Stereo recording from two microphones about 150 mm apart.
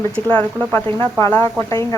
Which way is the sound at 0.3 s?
15° left (ahead or behind).